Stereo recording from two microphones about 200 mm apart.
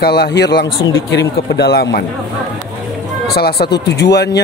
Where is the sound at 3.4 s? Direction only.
50° left (ahead or behind).